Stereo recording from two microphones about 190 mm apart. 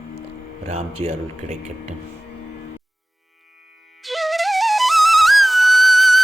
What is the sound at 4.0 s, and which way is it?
Flute, centre (ahead or behind).